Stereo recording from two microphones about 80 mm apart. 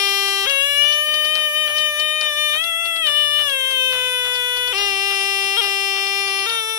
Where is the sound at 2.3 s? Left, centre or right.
Right.